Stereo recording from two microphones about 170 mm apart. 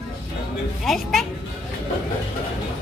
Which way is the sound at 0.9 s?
Centre (ahead or behind).